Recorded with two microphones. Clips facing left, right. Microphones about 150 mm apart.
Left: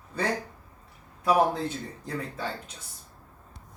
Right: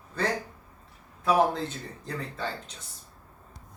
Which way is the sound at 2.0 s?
10° left (ahead or behind).